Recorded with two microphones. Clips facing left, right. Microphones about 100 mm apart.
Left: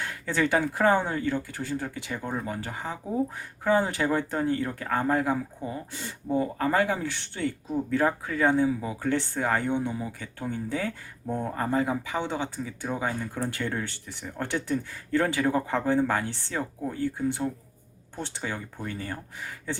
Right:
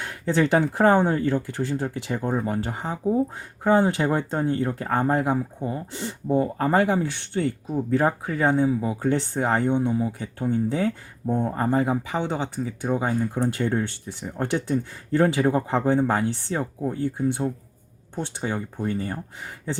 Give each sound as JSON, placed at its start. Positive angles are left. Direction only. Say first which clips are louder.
{"t": 0.0, "sound": "speech", "louder": "right 5 dB", "side_deg": -25}
{"t": 1.5, "sound": "speech", "louder": "right 5 dB", "side_deg": -25}